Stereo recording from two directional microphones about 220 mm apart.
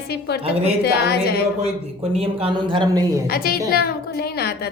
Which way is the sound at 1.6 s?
25° right (ahead or behind).